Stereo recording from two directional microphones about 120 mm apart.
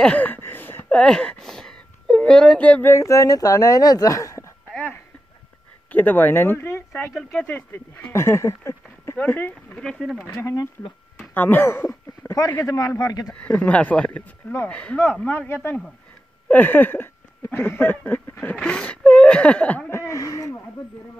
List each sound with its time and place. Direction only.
0.0 s speech: 15° left (ahead or behind); by 4.5 s 30° left (ahead or behind)
4.7 s a sound: 15° left (ahead or behind)
5.9 s speech: 15° left (ahead or behind)
10.2 s speech: 15° left (ahead or behind)
10.5 s speech: 35° left (ahead or behind)
11.3 s speech: 15° left (ahead or behind)
13.3 s speech: 10° left (ahead or behind)
15.3 s speech: 20° left (ahead or behind)
16.4 s a sound: 15° left (ahead or behind)
18.6 s speech: 10° left (ahead or behind); by 20.6 s 25° left (ahead or behind)